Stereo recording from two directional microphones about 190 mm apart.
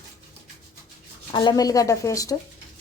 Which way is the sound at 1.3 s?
25° left (ahead or behind).